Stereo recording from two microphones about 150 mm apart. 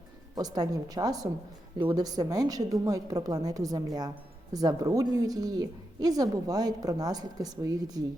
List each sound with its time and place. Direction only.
0.3 s a woman's voice: 25° right (ahead or behind)